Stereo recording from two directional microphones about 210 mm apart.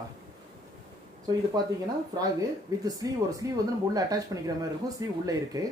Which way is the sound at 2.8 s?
15° right (ahead or behind).